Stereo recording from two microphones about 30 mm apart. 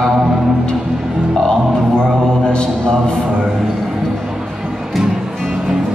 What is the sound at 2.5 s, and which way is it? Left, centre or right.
Music, left.